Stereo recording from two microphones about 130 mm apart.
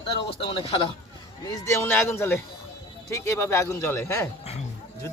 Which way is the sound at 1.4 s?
25° left (ahead or behind).